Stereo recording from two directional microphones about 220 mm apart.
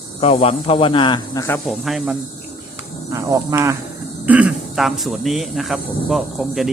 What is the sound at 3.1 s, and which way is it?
Speech, 15° right (ahead or behind).